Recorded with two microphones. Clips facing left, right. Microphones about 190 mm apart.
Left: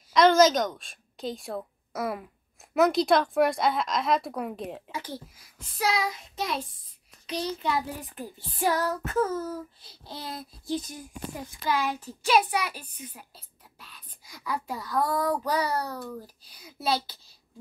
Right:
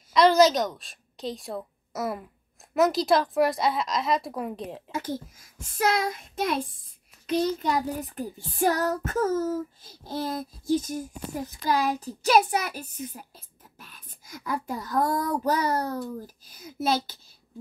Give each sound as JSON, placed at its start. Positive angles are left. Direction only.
{"t": 0.1, "sound": "a woman's voice", "side_deg": 0}
{"t": 4.9, "sound": "child singing", "side_deg": -45}